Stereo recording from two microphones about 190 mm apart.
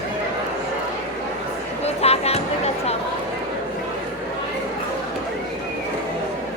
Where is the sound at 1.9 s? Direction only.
35° left (ahead or behind).